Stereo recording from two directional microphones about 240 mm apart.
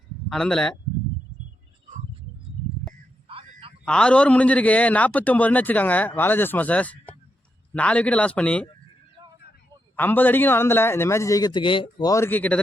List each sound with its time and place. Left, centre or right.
0.3 s speech: centre
3.2 s a sound: right
3.8 s a man's voice: centre
9.9 s a man's voice: centre